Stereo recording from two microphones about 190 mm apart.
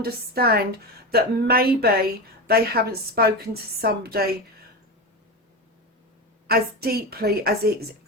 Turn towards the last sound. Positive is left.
turn(degrees=-55)  # may be behind; listen again after turning